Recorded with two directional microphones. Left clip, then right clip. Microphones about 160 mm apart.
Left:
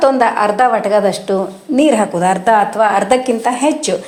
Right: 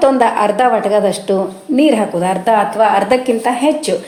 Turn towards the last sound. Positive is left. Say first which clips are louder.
# even
turn(degrees=0)  # may be behind; listen again after turning